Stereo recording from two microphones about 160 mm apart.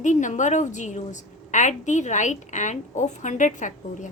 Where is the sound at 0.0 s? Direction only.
50° left (ahead or behind).